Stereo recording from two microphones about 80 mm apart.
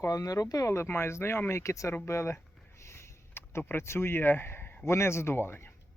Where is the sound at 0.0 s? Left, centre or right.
Left.